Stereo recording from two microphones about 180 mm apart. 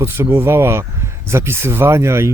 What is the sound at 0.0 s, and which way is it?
Speech, 15° right (ahead or behind).